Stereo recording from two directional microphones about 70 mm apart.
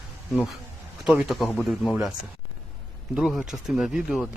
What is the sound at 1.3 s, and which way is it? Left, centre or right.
Speech, centre.